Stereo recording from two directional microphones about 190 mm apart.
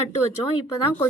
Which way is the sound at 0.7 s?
10° left (ahead or behind).